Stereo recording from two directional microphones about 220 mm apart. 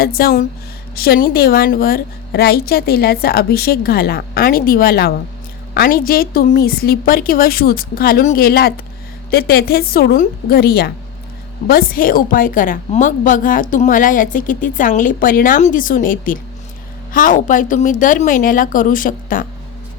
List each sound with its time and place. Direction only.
0.0 s a woman's voice: 45° left (ahead or behind)